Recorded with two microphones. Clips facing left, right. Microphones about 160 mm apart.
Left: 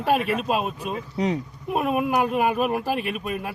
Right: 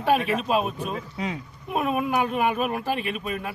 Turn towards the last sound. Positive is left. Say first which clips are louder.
# left 1 dB
turn(degrees=0)  # may be behind; listen again after turning